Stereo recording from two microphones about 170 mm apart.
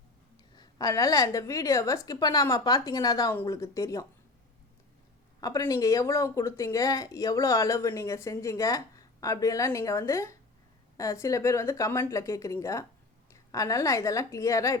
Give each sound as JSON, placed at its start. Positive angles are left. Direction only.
{"t": 0.5, "sound": "a woman's voice", "side_deg": 20}
{"t": 5.4, "sound": "a woman's voice", "side_deg": 20}